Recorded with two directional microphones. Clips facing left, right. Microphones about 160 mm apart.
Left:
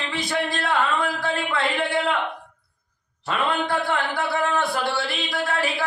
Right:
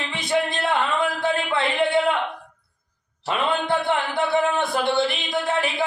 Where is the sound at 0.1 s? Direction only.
20° right (ahead or behind).